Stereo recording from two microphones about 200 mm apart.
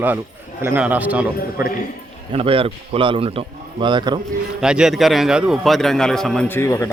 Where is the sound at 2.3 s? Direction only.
30° right (ahead or behind).